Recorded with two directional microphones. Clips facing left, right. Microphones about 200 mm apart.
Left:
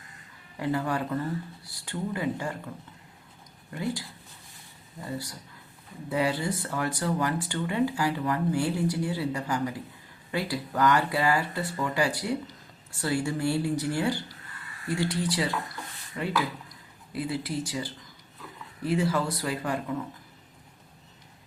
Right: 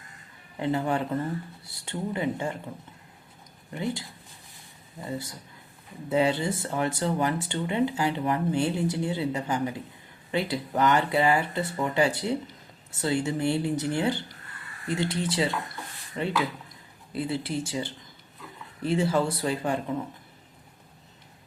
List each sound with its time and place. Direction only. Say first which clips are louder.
0.5 s speech: right 2 dB; 25° right (ahead or behind)
3.7 s speech: right 1 dB; 20° right (ahead or behind)